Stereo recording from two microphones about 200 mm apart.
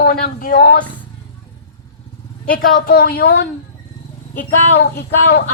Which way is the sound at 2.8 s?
45° left (ahead or behind).